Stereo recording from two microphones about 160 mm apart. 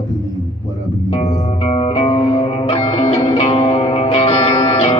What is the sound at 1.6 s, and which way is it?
Music, 40° left (ahead or behind).